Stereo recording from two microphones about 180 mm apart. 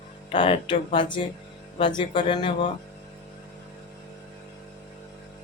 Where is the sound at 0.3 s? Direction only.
30° left (ahead or behind).